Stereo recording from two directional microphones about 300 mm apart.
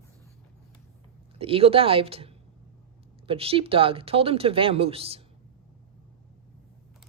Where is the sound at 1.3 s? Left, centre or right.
Centre.